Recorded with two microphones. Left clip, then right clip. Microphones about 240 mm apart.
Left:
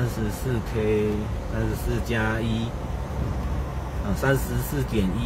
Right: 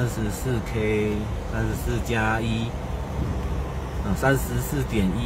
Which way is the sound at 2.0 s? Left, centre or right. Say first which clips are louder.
Right 3 dB; centre.